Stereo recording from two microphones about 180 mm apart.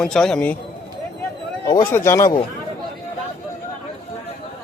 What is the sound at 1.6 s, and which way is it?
Speech, 20° left (ahead or behind).